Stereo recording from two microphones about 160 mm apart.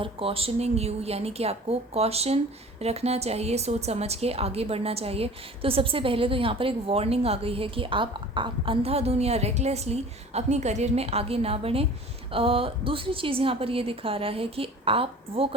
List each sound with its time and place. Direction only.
0.0 s a woman's voice: 35° right (ahead or behind)